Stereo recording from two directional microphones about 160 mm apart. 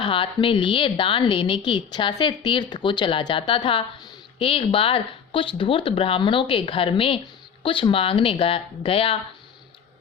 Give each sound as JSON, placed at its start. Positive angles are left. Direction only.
{"t": 0.0, "sound": "a woman's voice", "side_deg": 35}